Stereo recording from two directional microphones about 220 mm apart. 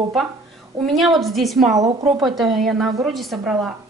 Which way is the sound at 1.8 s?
15° right (ahead or behind).